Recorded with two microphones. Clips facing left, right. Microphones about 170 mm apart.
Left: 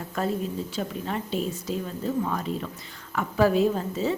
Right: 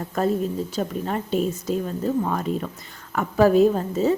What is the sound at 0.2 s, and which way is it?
A woman's voice, 40° right (ahead or behind).